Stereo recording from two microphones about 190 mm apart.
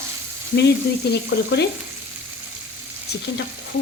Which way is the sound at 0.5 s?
60° left (ahead or behind).